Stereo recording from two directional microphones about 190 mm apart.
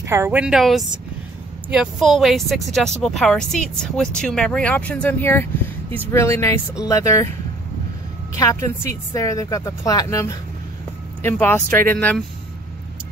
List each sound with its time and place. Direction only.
0.0 s speech: 15° right (ahead or behind); by 7.2 s 15° left (ahead or behind)
8.4 s speech: 15° left (ahead or behind)